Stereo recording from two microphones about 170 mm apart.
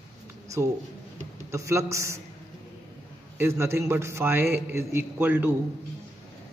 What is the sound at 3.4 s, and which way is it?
A man's voice, 15° right (ahead or behind).